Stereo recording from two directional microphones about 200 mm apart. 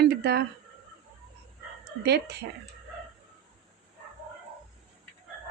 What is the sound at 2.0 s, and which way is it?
Speech, 55° right (ahead or behind).